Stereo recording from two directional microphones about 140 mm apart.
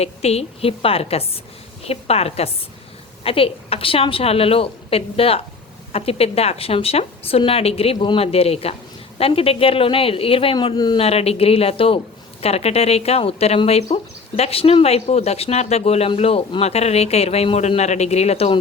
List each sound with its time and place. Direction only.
0.0 s a woman's voice: 50° left (ahead or behind)
11.0 s speech: 45° left (ahead or behind)